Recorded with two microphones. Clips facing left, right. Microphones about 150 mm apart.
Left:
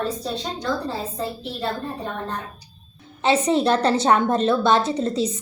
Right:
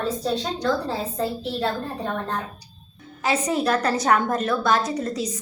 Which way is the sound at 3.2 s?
30° left (ahead or behind).